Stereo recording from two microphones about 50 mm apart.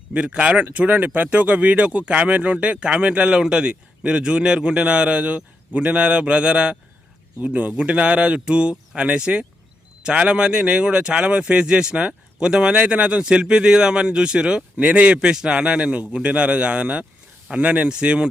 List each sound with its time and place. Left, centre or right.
0.1 s speech: right